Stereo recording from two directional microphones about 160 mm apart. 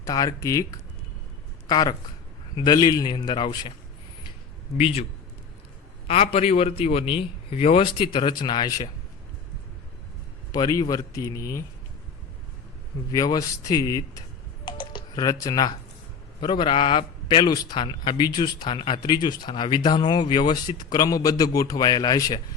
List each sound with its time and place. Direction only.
0.0 s a man's voice: 25° left (ahead or behind)
4.8 s a man's voice: 40° left (ahead or behind)
6.1 s a man's voice: 40° left (ahead or behind)
10.5 s a man's voice: 25° left (ahead or behind)
13.1 s a man's voice: 25° left (ahead or behind)
14.6 s typing: 30° left (ahead or behind)
16.4 s a man's voice: 30° left (ahead or behind)